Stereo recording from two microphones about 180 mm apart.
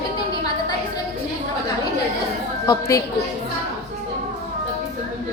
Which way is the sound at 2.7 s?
15° left (ahead or behind).